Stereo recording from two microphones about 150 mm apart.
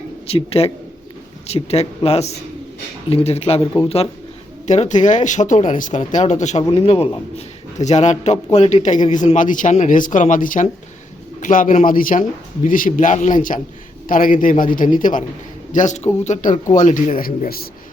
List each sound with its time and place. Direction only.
0.3 s a man's voice: 40° left (ahead or behind)
4.6 s a man's voice: 50° left (ahead or behind); by 17.7 s 85° left